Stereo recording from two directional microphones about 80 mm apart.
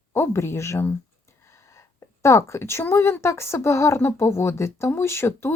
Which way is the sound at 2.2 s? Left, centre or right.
Left.